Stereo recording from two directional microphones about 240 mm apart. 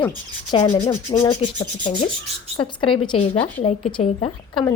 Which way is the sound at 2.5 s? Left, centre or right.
Left.